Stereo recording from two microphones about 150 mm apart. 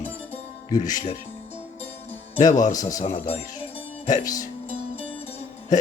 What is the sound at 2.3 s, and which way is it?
Speech, 55° left (ahead or behind).